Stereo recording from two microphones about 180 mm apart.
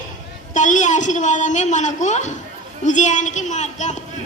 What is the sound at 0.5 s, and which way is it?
A woman's voice, 45° left (ahead or behind).